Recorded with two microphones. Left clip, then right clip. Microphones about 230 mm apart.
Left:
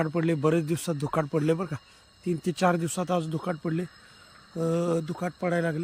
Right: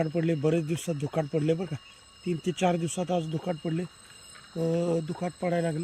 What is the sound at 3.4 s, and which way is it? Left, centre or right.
Speech, centre.